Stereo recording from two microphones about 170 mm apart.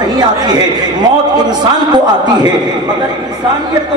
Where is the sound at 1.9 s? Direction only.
25° right (ahead or behind).